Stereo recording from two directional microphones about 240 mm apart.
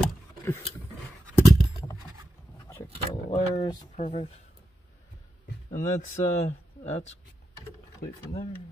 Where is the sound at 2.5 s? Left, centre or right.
Centre.